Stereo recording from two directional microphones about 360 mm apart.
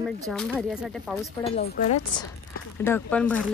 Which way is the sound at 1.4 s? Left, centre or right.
Centre.